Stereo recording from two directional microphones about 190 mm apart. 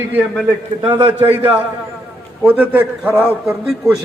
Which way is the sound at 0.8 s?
25° right (ahead or behind).